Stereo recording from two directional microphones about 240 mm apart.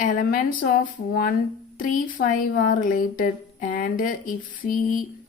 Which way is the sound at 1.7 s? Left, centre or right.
Left.